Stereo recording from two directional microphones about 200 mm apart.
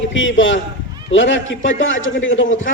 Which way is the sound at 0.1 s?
70° left (ahead or behind).